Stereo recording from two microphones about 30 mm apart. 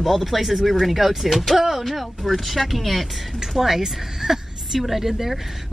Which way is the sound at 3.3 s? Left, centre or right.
Centre.